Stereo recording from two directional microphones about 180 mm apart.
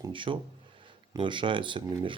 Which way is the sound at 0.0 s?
30° right (ahead or behind).